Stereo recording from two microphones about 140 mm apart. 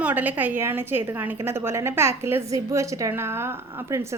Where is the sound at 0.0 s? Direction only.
10° right (ahead or behind).